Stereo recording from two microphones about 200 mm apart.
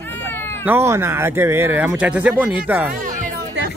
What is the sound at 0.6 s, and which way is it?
Speech, 10° right (ahead or behind).